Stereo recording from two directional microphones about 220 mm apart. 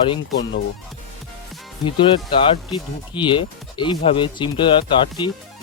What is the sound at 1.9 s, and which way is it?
Speech, 25° left (ahead or behind).